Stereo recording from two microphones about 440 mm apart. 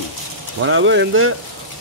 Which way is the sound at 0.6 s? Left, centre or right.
Right.